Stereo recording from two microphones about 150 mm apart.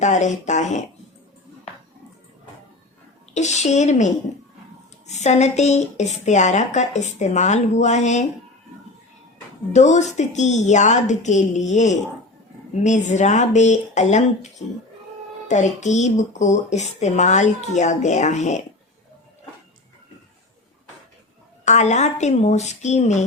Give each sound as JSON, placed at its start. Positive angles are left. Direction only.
{"t": 0.0, "sound": "a woman's voice", "side_deg": 55}
{"t": 3.3, "sound": "a woman's voice", "side_deg": 50}
{"t": 9.7, "sound": "a woman's voice", "side_deg": 50}
{"t": 15.4, "sound": "a woman's voice", "side_deg": 50}
{"t": 21.6, "sound": "a woman's voice", "side_deg": 50}